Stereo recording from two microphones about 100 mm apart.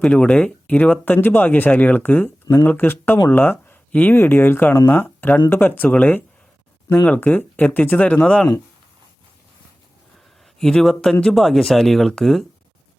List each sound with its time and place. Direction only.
0.0 s speech: 10° left (ahead or behind)
10.6 s speech: 5° left (ahead or behind)